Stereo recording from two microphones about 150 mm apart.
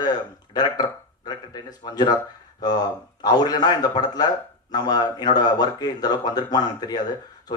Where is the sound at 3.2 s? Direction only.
25° left (ahead or behind).